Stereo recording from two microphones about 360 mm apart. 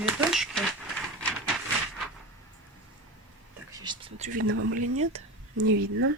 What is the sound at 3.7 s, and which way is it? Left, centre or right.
Speech, centre.